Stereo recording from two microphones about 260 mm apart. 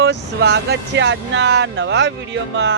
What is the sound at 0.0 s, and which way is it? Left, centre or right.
Speech, right.